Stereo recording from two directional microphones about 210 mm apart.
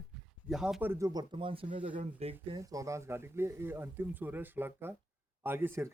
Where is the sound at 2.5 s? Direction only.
15° right (ahead or behind).